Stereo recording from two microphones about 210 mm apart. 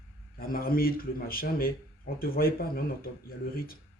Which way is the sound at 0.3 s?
45° left (ahead or behind).